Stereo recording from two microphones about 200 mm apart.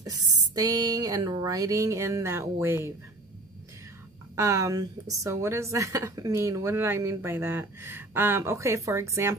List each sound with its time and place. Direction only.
0.6 s a woman's voice: 20° right (ahead or behind)
4.4 s a woman's voice: 15° right (ahead or behind)